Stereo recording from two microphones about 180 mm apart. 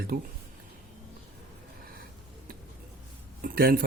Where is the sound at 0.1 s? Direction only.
50° right (ahead or behind).